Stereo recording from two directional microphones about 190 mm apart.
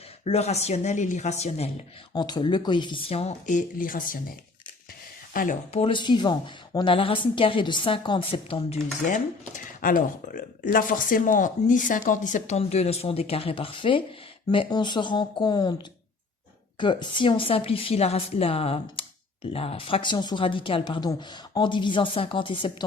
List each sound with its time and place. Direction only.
0.3 s a woman's voice: 35° left (ahead or behind)
2.1 s a woman's voice: 20° left (ahead or behind); by 4.2 s 45° left (ahead or behind)
5.3 s speech: 45° left (ahead or behind)
5.8 s a woman's voice: 25° left (ahead or behind)
16.8 s a woman's voice: 25° left (ahead or behind)